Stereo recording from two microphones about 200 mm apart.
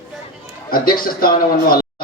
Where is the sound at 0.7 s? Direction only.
45° left (ahead or behind).